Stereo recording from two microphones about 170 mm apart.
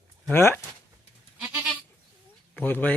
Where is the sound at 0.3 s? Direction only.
10° left (ahead or behind).